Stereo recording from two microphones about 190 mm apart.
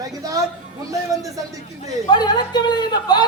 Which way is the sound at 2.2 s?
25° left (ahead or behind).